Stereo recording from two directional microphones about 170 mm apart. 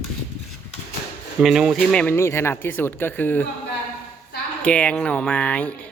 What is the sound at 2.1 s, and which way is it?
Speech, 15° left (ahead or behind).